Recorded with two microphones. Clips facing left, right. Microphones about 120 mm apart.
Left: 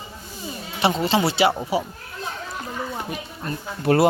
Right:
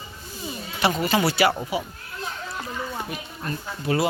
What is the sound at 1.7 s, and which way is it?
Speech, 35° left (ahead or behind).